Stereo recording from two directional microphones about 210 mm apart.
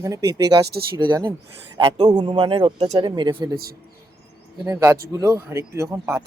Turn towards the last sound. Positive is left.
turn(degrees=-15)  # may be behind; listen again after turning